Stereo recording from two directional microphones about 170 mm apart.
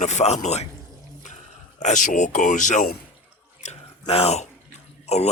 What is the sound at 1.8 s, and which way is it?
Speech, 45° left (ahead or behind).